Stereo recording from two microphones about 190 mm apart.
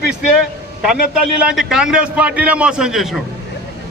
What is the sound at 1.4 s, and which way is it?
A man's voice, 5° right (ahead or behind).